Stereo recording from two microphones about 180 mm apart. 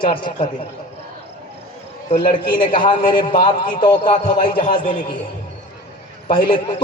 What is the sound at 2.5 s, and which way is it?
A man's voice, 25° left (ahead or behind).